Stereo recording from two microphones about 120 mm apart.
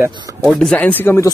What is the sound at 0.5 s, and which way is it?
Speech, 10° left (ahead or behind).